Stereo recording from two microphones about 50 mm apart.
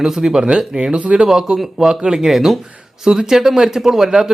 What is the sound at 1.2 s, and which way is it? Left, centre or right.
Speech, centre.